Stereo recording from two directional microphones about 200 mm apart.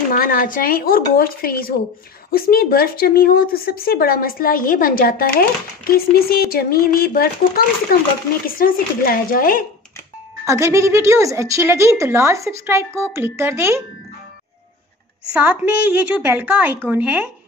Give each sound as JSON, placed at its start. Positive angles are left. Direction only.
{"t": 0.1, "sound": "speech", "side_deg": 45}
{"t": 10.4, "sound": "a woman's voice", "side_deg": -15}
{"t": 15.3, "sound": "a woman's voice", "side_deg": -5}